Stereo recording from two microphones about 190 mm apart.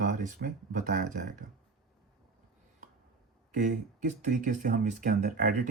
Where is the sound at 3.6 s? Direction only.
40° right (ahead or behind).